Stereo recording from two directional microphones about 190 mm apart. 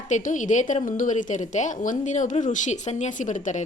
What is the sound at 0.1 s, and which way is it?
A woman's voice, 40° left (ahead or behind).